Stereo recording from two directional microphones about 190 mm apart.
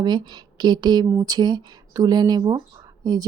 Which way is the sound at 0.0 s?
20° right (ahead or behind).